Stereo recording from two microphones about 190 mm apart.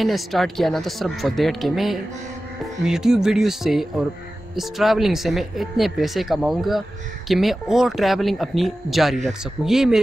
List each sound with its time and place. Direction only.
0.0 s speech: centre (ahead or behind)